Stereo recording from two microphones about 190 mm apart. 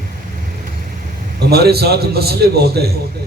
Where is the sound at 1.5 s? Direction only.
55° right (ahead or behind).